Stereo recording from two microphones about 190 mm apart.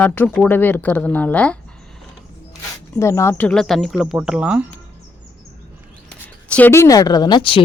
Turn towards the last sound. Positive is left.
turn(degrees=25)  # may be behind; listen again after turning